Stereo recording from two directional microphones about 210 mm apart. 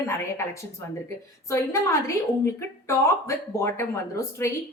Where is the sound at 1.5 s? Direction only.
15° left (ahead or behind).